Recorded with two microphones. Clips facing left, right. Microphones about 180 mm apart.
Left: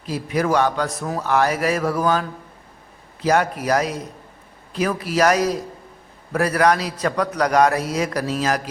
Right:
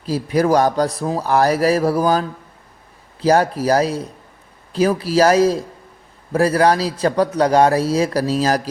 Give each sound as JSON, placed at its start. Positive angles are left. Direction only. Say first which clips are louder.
{"t": 0.0, "sound": "a man's voice", "louder": "right 5 dB", "side_deg": -35}